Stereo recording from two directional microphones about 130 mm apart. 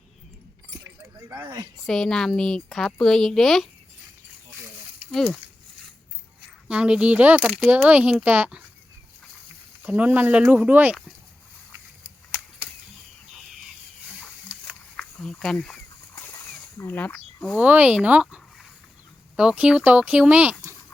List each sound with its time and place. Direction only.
1.9 s a woman's voice: 5° left (ahead or behind)
5.1 s a woman's voice: centre (ahead or behind)
6.7 s speech: 5° right (ahead or behind)
9.8 s speech: 10° right (ahead or behind)
14.6 s a sound: 5° left (ahead or behind)
16.1 s a sound: 15° left (ahead or behind)
17.6 s speech: 10° right (ahead or behind)